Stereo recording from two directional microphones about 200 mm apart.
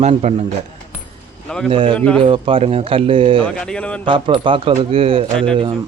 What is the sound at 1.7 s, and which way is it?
Speech, 25° right (ahead or behind).